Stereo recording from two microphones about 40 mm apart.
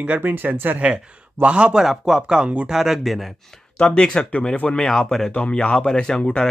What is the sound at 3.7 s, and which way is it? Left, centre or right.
A man's voice, left.